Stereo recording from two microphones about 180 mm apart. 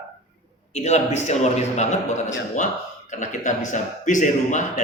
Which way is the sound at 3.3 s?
45° left (ahead or behind).